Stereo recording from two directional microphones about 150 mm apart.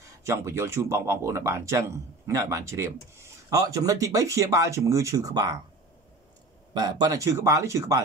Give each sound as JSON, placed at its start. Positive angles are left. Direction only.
{"t": 0.2, "sound": "speech", "side_deg": -20}
{"t": 6.7, "sound": "speech", "side_deg": -30}